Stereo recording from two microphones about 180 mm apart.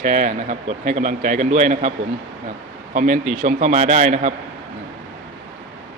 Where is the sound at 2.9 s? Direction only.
45° right (ahead or behind).